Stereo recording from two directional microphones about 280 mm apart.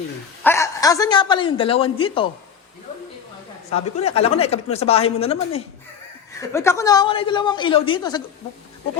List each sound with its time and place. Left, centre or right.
0.4 s speech: centre
3.7 s speech: left
6.5 s speech: centre